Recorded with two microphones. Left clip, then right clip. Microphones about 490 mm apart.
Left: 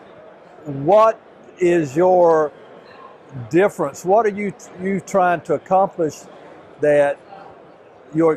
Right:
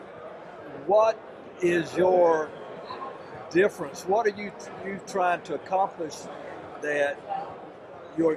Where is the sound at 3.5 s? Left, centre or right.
Left.